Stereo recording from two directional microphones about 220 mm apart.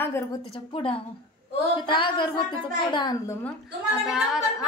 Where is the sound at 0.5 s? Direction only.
25° left (ahead or behind).